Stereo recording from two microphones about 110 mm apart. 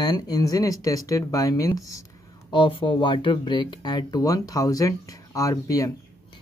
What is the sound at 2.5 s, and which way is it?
Speech, 50° left (ahead or behind).